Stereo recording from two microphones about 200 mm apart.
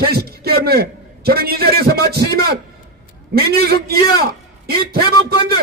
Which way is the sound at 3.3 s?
50° right (ahead or behind).